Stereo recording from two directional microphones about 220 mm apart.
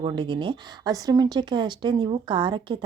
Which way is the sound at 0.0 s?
20° right (ahead or behind).